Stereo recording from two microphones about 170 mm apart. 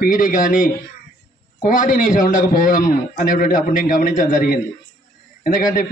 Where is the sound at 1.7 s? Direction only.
50° left (ahead or behind).